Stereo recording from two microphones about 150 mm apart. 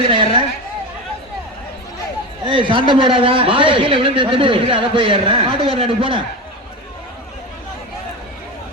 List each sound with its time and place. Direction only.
0.1 s chatter: 35° right (ahead or behind)
2.4 s a man's voice: 35° right (ahead or behind)